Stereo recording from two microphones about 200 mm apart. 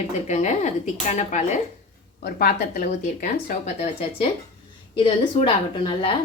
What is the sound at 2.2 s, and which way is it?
A woman's voice, 45° left (ahead or behind).